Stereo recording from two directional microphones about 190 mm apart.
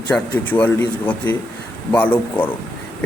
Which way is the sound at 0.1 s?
10° left (ahead or behind).